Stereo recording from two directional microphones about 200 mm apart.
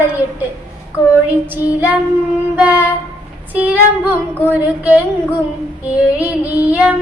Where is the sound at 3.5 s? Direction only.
10° right (ahead or behind).